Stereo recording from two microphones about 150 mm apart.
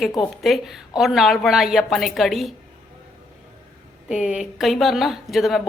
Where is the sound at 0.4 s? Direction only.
Centre (ahead or behind).